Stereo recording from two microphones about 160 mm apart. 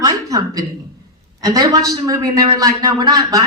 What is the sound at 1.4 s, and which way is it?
Speech, 25° right (ahead or behind).